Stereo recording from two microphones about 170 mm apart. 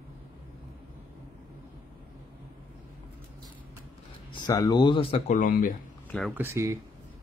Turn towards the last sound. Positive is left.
turn(degrees=-15)  # may be behind; listen again after turning